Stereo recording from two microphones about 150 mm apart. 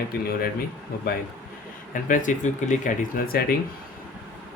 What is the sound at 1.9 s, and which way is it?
Speech, 60° left (ahead or behind).